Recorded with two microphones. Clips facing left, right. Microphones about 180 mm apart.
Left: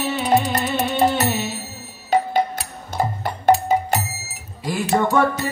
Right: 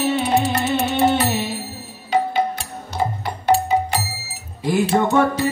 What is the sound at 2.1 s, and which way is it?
Music, 45° left (ahead or behind).